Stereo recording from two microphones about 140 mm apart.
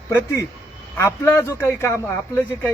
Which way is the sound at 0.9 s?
20° left (ahead or behind).